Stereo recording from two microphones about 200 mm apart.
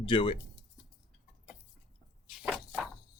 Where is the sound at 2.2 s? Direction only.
Centre (ahead or behind).